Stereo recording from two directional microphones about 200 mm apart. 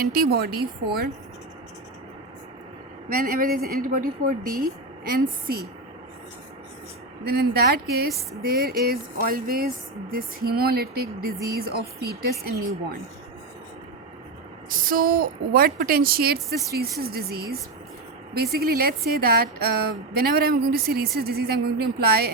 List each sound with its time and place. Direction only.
0.0 s a woman's voice: 50° right (ahead or behind)
3.2 s a woman's voice: 45° right (ahead or behind)
7.3 s a woman's voice: 50° right (ahead or behind)
14.7 s a woman's voice: 45° right (ahead or behind)